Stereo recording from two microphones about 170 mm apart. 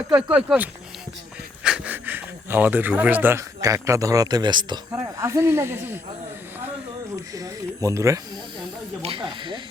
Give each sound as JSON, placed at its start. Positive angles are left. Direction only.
{"t": 0.2, "sound": "speech", "side_deg": -10}
{"t": 7.3, "sound": "speech", "side_deg": -20}
{"t": 9.0, "sound": "speech", "side_deg": -30}